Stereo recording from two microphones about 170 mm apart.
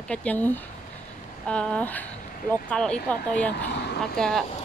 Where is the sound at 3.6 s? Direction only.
75° left (ahead or behind).